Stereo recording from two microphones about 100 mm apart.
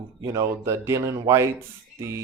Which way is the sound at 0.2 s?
30° right (ahead or behind).